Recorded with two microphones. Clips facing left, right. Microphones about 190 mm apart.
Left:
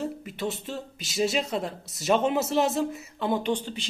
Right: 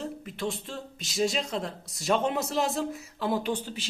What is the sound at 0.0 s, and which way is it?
Speech, 5° left (ahead or behind).